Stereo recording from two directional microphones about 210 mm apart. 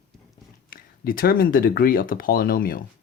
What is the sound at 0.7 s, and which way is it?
Speech, 45° left (ahead or behind).